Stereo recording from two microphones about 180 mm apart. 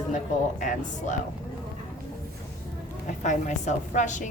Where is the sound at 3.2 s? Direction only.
40° left (ahead or behind).